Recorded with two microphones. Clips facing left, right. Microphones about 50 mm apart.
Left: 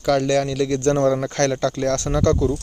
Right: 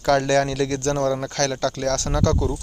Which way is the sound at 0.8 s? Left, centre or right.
Centre.